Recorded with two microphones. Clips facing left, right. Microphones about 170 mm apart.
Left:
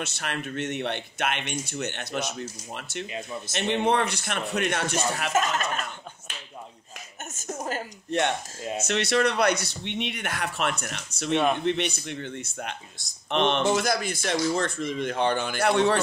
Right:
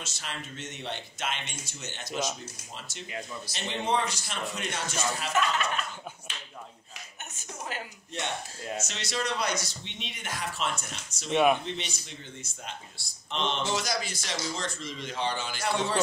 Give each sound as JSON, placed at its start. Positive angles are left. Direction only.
{"t": 0.0, "sound": "speech", "side_deg": 65}
{"t": 3.1, "sound": "a man's voice", "side_deg": 20}
{"t": 3.5, "sound": "speech", "side_deg": 60}
{"t": 5.3, "sound": "speech", "side_deg": 45}
{"t": 7.3, "sound": "speech", "side_deg": 45}
{"t": 8.8, "sound": "speech", "side_deg": 65}
{"t": 11.3, "sound": "a man's voice", "side_deg": -10}
{"t": 11.6, "sound": "speech", "side_deg": 60}